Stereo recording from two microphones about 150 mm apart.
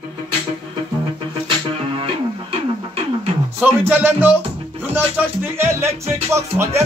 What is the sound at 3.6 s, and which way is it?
Music, 10° right (ahead or behind).